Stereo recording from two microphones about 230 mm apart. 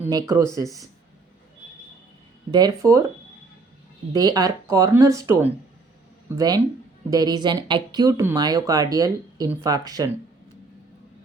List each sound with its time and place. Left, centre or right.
0.0 s speech: centre
2.5 s speech: centre
4.1 s speech: centre